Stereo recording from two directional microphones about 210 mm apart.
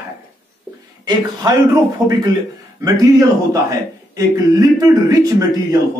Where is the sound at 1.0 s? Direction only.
15° right (ahead or behind).